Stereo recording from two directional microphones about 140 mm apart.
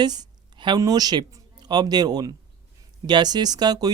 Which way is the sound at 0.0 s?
30° right (ahead or behind).